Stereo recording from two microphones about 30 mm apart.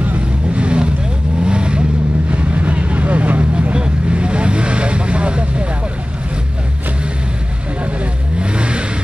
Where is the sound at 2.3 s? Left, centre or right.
Right.